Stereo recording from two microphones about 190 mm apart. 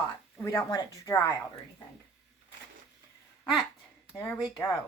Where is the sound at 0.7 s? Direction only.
15° left (ahead or behind).